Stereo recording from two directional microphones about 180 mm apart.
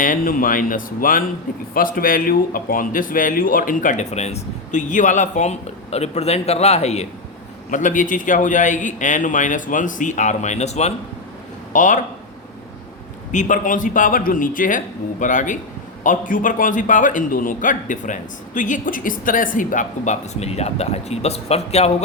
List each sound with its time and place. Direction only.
0.0 s a man's voice: 50° left (ahead or behind)
13.3 s a man's voice: 45° left (ahead or behind)